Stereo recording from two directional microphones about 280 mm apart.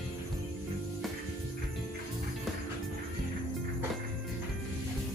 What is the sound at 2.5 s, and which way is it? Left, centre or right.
Music, centre.